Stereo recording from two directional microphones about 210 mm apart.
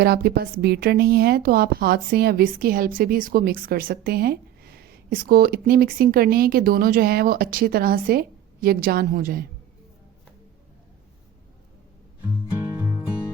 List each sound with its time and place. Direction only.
0.0 s speech: 50° right (ahead or behind)